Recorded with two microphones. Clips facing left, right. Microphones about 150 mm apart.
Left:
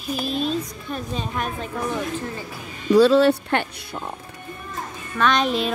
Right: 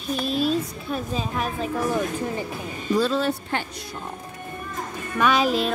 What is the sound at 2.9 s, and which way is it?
Speech, 75° left (ahead or behind).